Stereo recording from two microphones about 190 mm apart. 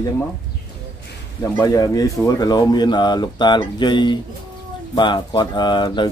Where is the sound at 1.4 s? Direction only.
15° left (ahead or behind).